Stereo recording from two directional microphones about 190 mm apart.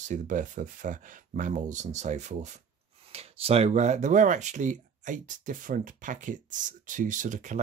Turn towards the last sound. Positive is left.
turn(degrees=-40)  # may be behind; listen again after turning